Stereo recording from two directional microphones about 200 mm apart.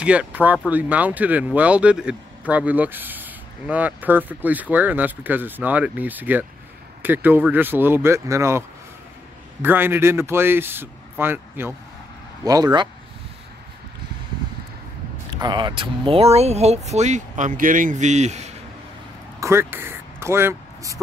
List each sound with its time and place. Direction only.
0.0 s speech: 5° right (ahead or behind)
15.4 s speech: 25° right (ahead or behind)
19.4 s speech: 10° right (ahead or behind)